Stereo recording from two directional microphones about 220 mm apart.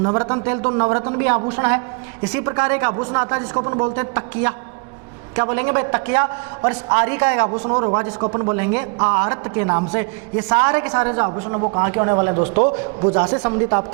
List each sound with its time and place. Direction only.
0.0 s a man's voice: 20° right (ahead or behind)
3.9 s a man's voice: 15° right (ahead or behind)
12.5 s a man's voice: 30° right (ahead or behind)